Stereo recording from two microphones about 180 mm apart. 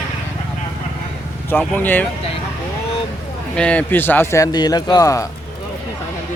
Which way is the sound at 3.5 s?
5° left (ahead or behind).